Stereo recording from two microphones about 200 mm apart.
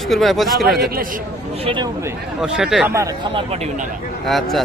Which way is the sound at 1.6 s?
25° right (ahead or behind).